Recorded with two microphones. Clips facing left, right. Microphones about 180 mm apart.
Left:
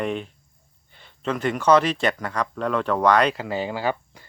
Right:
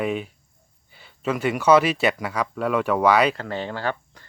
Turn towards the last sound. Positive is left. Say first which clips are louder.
# left 2 dB
turn(degrees=10)  # may be behind; listen again after turning